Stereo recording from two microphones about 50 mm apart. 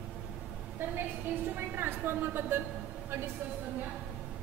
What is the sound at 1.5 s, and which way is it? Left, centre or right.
A woman's voice, right.